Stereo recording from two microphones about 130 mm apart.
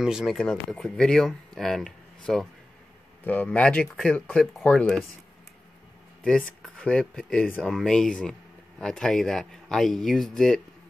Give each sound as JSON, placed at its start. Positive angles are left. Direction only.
{"t": 0.0, "sound": "speech", "side_deg": -5}
{"t": 6.2, "sound": "speech", "side_deg": 5}